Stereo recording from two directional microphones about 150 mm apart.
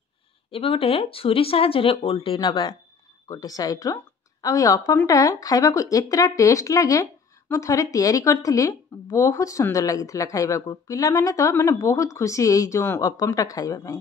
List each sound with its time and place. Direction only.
0.5 s a woman's voice: 35° left (ahead or behind)